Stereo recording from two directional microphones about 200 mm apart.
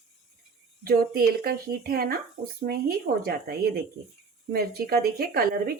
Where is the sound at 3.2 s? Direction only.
50° right (ahead or behind).